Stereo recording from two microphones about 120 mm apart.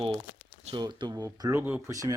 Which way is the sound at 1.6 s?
15° right (ahead or behind).